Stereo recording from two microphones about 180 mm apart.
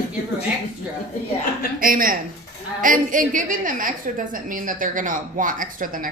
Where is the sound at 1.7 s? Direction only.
50° right (ahead or behind).